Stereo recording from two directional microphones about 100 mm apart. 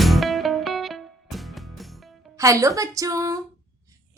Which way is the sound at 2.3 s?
35° right (ahead or behind).